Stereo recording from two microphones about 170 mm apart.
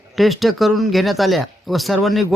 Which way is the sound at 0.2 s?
Centre (ahead or behind).